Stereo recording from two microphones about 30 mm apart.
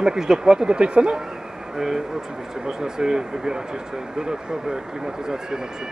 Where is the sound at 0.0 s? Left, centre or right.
Right.